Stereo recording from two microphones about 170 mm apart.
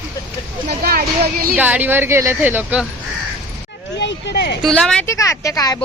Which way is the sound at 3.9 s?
85° left.